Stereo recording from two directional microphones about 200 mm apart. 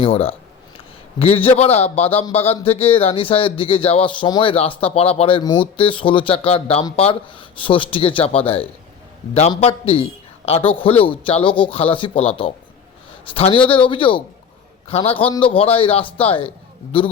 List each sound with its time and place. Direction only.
0.0 s a man's voice: 30° left (ahead or behind)